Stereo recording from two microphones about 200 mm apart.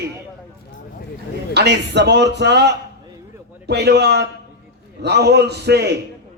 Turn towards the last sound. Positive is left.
turn(degrees=-55)  # may be behind; listen again after turning